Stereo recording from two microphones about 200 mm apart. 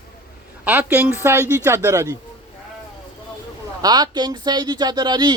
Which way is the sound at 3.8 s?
20° right (ahead or behind).